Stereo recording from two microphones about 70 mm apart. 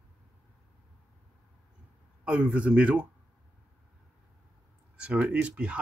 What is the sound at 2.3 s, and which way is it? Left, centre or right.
Speech, centre.